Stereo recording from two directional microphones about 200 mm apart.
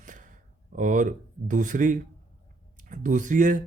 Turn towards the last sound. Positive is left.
turn(degrees=-40)  # may be behind; listen again after turning